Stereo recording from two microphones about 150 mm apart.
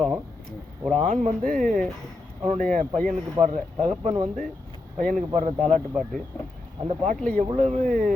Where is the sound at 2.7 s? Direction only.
65° right (ahead or behind).